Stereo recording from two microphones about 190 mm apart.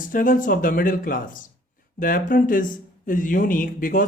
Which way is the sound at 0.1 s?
45° left (ahead or behind).